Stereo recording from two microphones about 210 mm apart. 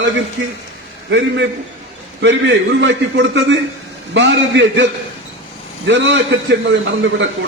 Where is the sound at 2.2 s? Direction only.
60° right (ahead or behind).